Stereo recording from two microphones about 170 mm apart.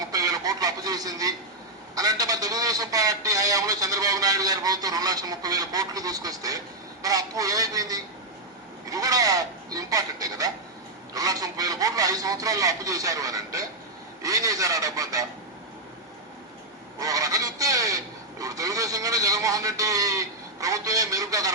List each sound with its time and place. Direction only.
0.0 s radio: 20° right (ahead or behind)
2.0 s a man's voice: 20° right (ahead or behind)
17.0 s a man's voice: 20° right (ahead or behind)